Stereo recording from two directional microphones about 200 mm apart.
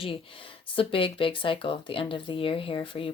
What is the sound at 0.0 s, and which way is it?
Speech, 25° left (ahead or behind).